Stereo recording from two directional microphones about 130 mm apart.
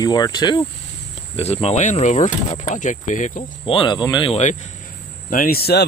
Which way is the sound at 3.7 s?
40° left (ahead or behind).